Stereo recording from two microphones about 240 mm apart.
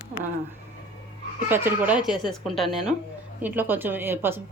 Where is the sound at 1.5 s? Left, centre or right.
Centre.